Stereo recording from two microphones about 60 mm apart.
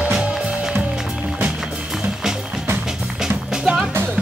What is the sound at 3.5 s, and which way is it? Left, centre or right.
Music, centre.